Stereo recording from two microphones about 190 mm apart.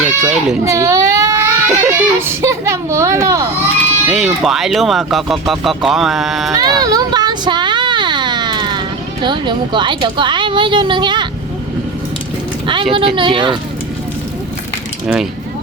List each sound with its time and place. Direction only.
0.0 s speech: 10° right (ahead or behind)
4.0 s speech: 5° right (ahead or behind)
6.5 s a sound: 20° right (ahead or behind)
9.2 s a woman's voice: 25° right (ahead or behind)
12.6 s a woman's voice: 25° right (ahead or behind)
15.0 s speech: 5° right (ahead or behind)